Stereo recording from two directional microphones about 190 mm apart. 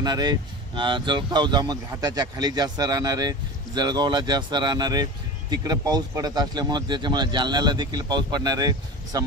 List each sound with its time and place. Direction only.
0.0 s speech: 20° right (ahead or behind)